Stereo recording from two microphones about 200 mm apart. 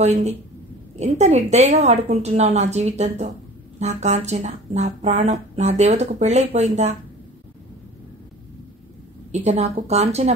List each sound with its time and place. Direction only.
0.0 s speech: 35° right (ahead or behind)
9.3 s speech: 35° right (ahead or behind)